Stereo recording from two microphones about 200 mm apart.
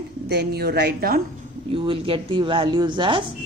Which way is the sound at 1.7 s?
25° right (ahead or behind).